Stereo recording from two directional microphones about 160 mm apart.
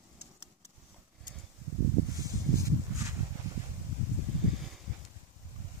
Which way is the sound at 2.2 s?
20° right (ahead or behind).